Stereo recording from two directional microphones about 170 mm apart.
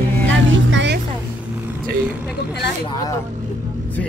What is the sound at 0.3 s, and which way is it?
Vehicle, 90° right.